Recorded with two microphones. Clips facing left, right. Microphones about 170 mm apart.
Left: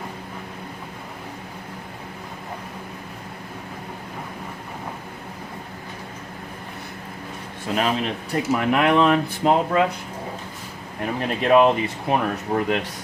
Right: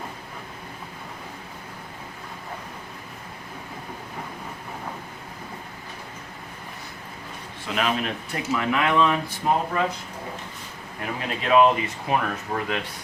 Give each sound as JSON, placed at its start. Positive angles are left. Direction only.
{"t": 7.8, "sound": "speech", "side_deg": 35}
{"t": 8.7, "sound": "speech", "side_deg": 55}
{"t": 11.0, "sound": "speech", "side_deg": 40}